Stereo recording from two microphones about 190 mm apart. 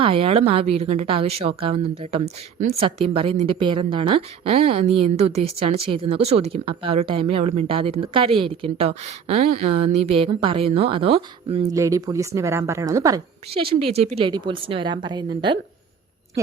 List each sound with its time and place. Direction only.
0.0 s a woman's voice: 30° right (ahead or behind)
11.7 s a woman's voice: 15° right (ahead or behind)
13.5 s a woman's voice: 30° right (ahead or behind)